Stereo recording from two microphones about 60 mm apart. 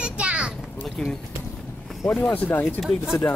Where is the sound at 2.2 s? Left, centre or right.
Left.